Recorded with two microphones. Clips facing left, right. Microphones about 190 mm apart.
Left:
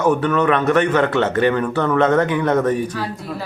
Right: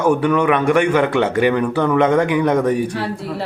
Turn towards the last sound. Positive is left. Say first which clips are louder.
# right 3 dB
turn(degrees=-30)  # may be behind; listen again after turning